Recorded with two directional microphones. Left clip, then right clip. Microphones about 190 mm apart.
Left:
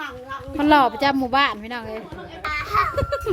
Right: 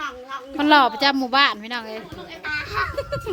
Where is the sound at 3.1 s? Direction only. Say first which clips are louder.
Left 3 dB; 50° left (ahead or behind).